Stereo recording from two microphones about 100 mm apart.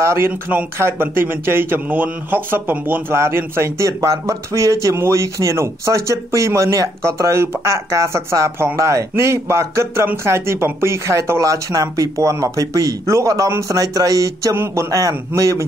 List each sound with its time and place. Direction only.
0.0 s a man's voice: 25° right (ahead or behind)